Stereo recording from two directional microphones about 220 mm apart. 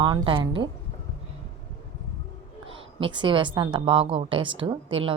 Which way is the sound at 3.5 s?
20° right (ahead or behind).